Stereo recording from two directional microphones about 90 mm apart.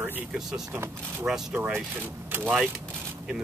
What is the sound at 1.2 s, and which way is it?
Speech, 10° right (ahead or behind).